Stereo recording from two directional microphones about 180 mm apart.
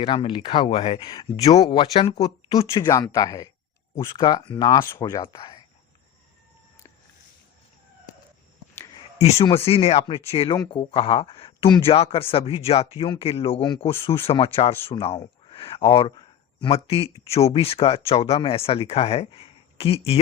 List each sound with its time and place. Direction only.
0.0 s speech: 30° left (ahead or behind)
9.1 s speech: 35° left (ahead or behind)